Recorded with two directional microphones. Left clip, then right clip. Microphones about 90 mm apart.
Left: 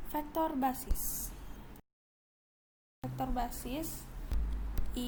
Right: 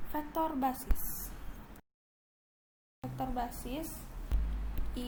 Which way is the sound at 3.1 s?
40° left (ahead or behind).